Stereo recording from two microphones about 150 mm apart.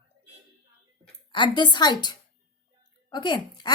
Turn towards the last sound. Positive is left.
turn(degrees=30)  # may be behind; listen again after turning